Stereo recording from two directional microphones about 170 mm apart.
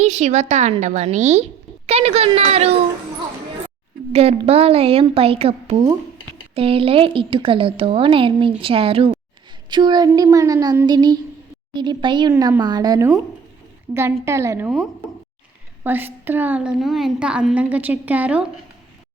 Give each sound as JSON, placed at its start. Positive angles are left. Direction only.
{"t": 0.0, "sound": "a woman's voice", "side_deg": -45}
{"t": 4.1, "sound": "a woman's voice", "side_deg": -35}
{"t": 15.8, "sound": "a woman's voice", "side_deg": -10}